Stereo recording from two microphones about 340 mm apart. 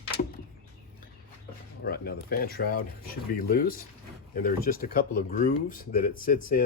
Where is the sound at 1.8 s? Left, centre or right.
Left.